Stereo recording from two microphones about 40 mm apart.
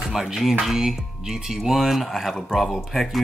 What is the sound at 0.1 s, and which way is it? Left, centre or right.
Speech, centre.